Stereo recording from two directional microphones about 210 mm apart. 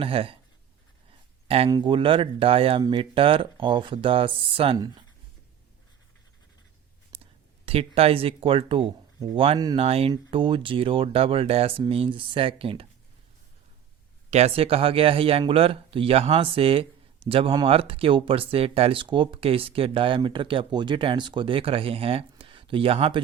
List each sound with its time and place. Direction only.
0.0 s speech: 25° right (ahead or behind)
1.5 s speech: 30° right (ahead or behind)
7.1 s whispering: 25° right (ahead or behind)
7.6 s speech: 30° right (ahead or behind)
14.3 s speech: 30° right (ahead or behind)